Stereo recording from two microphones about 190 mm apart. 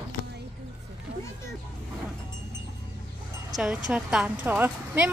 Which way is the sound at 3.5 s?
Centre (ahead or behind).